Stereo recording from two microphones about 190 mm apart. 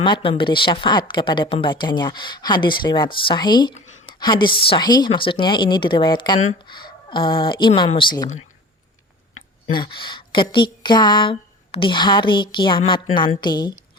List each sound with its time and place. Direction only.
0.0 s a woman's voice: 25° left (ahead or behind)
3.8 s a sound: 35° left (ahead or behind)
4.2 s a woman's voice: 25° left (ahead or behind)
9.7 s a woman's voice: 25° left (ahead or behind)